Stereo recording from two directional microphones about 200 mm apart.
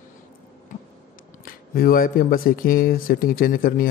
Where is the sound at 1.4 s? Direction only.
45° left (ahead or behind).